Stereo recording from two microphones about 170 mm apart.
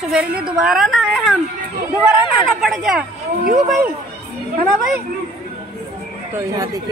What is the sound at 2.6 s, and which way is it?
Speech, centre (ahead or behind).